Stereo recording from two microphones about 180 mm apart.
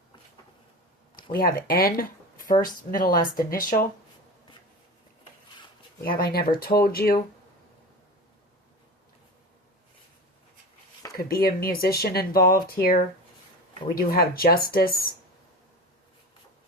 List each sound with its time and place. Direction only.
1.1 s speech: 55° left (ahead or behind)
6.0 s speech: 55° left (ahead or behind)
11.2 s speech: 55° left (ahead or behind)